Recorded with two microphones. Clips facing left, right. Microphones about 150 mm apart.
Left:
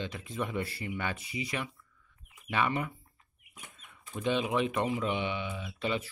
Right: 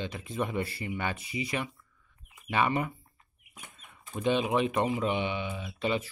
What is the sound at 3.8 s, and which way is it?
Chicken, 35° right (ahead or behind).